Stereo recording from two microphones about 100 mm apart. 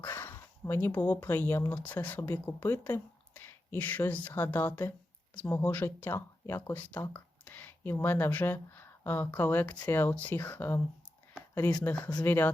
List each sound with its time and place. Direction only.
0.0 s speech: 20° left (ahead or behind)
11.8 s speech: 10° left (ahead or behind)